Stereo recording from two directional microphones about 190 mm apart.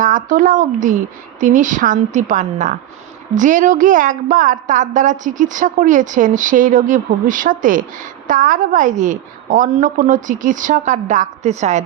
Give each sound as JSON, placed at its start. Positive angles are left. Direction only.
{"t": 0.0, "sound": "a woman's voice", "side_deg": -45}